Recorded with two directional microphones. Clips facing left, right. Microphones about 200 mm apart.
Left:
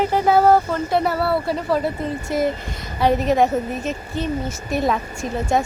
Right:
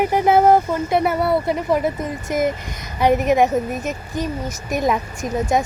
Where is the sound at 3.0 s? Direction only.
15° right (ahead or behind).